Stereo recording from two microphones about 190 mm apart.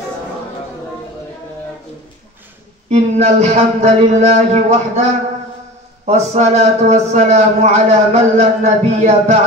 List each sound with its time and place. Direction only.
2.9 s speech: 35° right (ahead or behind)
6.0 s speech: 35° right (ahead or behind)